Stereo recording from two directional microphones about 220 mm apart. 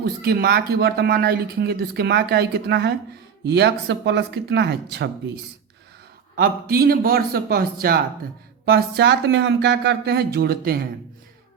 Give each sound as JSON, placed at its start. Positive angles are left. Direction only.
{"t": 0.0, "sound": "speech", "side_deg": -45}